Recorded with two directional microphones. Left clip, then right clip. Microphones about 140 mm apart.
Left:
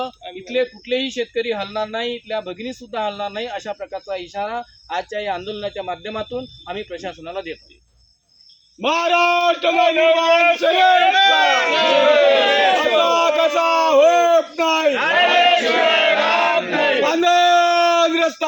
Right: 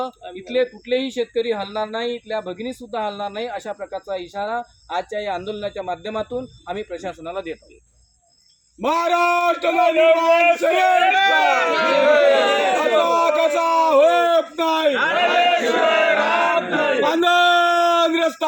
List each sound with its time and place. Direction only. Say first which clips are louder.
0.0 s a man's voice: even; 40° right (ahead or behind)
1.5 s speech: even; centre (ahead or behind)
2.6 s a man's voice: left 1 dB; 40° right (ahead or behind)
3.1 s speech: left 1 dB; 5° right (ahead or behind)
4.1 s speech: even; 40° right (ahead or behind)
6.7 s speech: right 1 dB; 45° right (ahead or behind)
8.9 s a man's voice: left 2 dB; 15° right (ahead or behind)
14.3 s a sound: left 2 dB; 15° right (ahead or behind)
15.8 s battle cry: left 1 dB; centre (ahead or behind)
17.0 s a sound: even; 20° right (ahead or behind)